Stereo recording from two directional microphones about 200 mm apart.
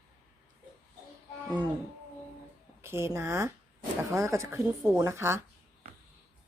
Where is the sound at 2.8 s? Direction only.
15° right (ahead or behind).